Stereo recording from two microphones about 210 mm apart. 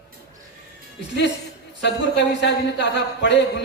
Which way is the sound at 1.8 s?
55° left (ahead or behind).